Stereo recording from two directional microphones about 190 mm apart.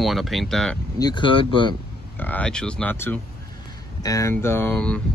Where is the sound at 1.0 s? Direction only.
25° left (ahead or behind).